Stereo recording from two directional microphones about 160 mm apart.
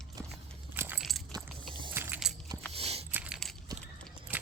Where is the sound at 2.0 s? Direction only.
15° right (ahead or behind).